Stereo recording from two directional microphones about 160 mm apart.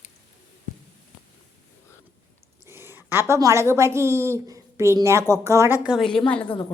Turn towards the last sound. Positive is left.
turn(degrees=35)  # may be behind; listen again after turning